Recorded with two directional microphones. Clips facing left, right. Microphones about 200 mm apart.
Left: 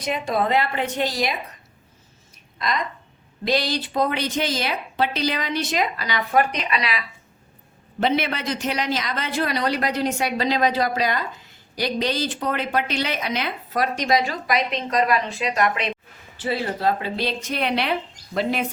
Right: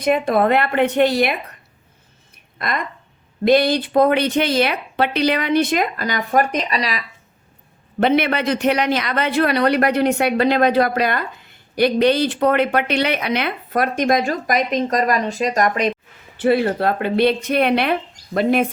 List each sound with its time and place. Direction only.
0.0 s a man's voice: 55° right (ahead or behind)
2.6 s a man's voice: 55° right (ahead or behind); by 7.0 s 40° right (ahead or behind)
7.9 s a man's voice: 60° right (ahead or behind); by 15.9 s 45° right (ahead or behind)
16.4 s a man's voice: 60° right (ahead or behind)